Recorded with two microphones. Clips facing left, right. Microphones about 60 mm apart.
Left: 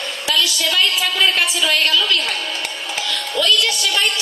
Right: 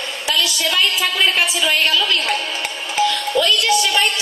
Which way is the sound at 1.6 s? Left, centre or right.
Right.